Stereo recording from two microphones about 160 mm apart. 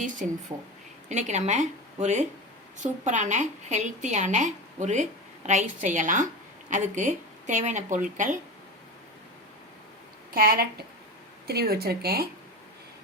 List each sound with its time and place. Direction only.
0.2 s a woman's voice: 50° right (ahead or behind)
10.3 s speech: 70° right (ahead or behind)